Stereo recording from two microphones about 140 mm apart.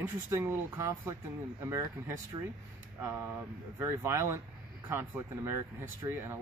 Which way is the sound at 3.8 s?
20° right (ahead or behind).